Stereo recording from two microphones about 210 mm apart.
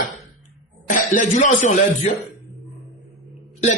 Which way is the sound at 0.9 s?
40° left (ahead or behind).